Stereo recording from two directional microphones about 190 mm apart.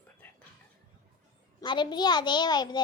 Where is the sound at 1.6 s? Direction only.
25° left (ahead or behind).